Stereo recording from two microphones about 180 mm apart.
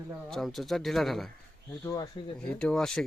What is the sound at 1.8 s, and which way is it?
Speech, 20° left (ahead or behind).